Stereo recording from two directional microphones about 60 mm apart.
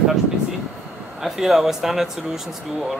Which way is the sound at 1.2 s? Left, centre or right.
Centre.